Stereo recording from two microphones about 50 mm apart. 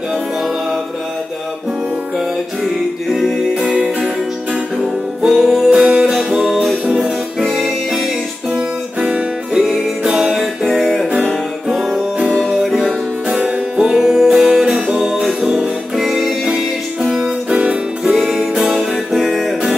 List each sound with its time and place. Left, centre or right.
2.1 s music: centre
5.4 s music: centre
5.7 s music: centre
7.5 s music: centre
8.5 s music: right
9.5 s music: centre
13.3 s music: right
15.6 s music: centre; by 17.7 s right
18.0 s music: centre